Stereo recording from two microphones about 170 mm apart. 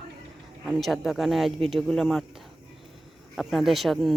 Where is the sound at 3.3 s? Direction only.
Centre (ahead or behind).